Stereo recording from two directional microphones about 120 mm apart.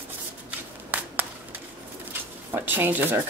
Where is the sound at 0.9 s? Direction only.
15° right (ahead or behind).